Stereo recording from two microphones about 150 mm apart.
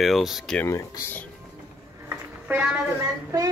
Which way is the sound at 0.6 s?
20° left (ahead or behind).